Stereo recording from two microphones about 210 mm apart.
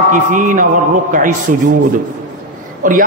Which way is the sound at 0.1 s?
40° right (ahead or behind).